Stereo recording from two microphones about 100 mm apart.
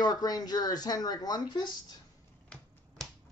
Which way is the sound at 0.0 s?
40° left (ahead or behind).